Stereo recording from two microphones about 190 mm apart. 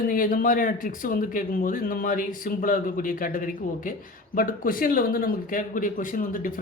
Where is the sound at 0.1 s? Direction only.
45° left (ahead or behind).